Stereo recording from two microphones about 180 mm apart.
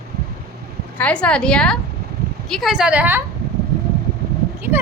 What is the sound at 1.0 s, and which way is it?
A woman's voice, 5° left (ahead or behind).